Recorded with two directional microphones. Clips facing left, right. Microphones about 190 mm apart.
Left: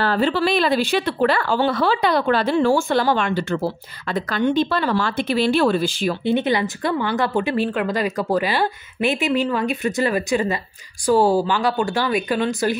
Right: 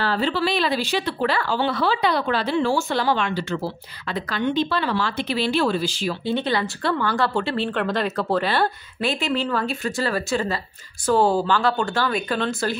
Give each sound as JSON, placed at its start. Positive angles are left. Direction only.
{"t": 0.0, "sound": "speech", "side_deg": 50}
{"t": 6.2, "sound": "speech", "side_deg": 20}